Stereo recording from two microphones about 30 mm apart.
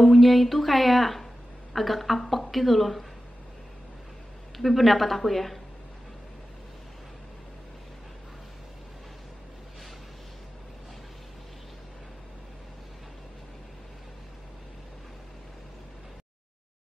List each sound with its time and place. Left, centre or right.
0.0 s speech: centre
4.6 s a woman's voice: centre